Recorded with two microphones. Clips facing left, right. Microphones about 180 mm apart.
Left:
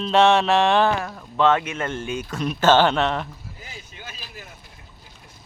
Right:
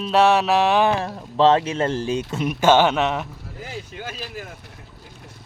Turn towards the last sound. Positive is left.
turn(degrees=-70)  # may be behind; listen again after turning